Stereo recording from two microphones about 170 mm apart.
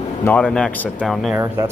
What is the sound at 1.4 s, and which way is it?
Speech, 15° right (ahead or behind).